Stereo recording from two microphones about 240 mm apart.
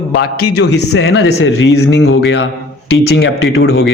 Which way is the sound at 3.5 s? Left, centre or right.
Left.